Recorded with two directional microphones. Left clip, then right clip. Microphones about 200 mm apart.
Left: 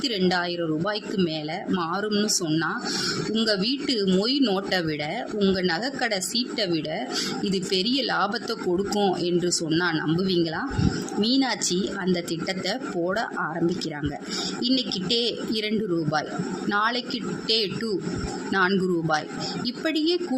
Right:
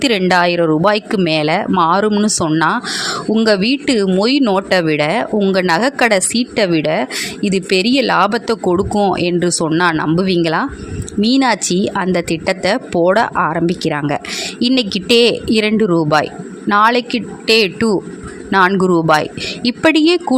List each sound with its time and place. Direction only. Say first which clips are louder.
0.0 s speech: right 12 dB; 45° right (ahead or behind)